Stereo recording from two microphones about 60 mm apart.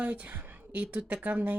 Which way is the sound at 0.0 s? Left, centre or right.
Right.